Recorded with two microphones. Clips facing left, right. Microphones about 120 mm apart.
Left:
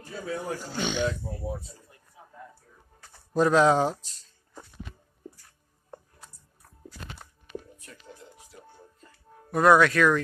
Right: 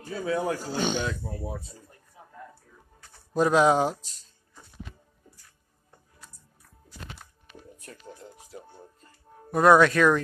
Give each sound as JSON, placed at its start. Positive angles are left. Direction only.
{"t": 0.3, "sound": "speech", "side_deg": -90}
{"t": 0.7, "sound": "speech", "side_deg": -40}
{"t": 3.3, "sound": "speech", "side_deg": -15}
{"t": 9.5, "sound": "speech", "side_deg": -20}